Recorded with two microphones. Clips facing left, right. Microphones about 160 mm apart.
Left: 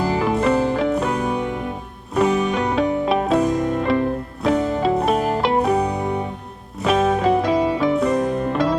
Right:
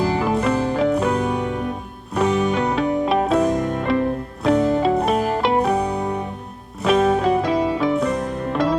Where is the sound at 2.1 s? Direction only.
Centre (ahead or behind).